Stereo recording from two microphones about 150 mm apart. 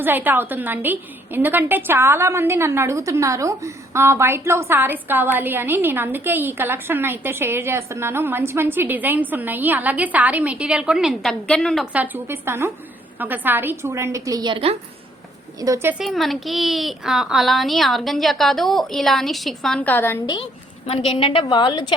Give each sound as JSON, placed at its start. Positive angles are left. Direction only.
{"t": 0.0, "sound": "a woman's voice", "side_deg": -10}
{"t": 11.9, "sound": "a woman's voice", "side_deg": -10}
{"t": 15.6, "sound": "a woman's voice", "side_deg": -20}
{"t": 16.0, "sound": "speech", "side_deg": 0}
{"t": 20.2, "sound": "a woman's voice", "side_deg": 30}
{"t": 20.8, "sound": "a woman's voice", "side_deg": 40}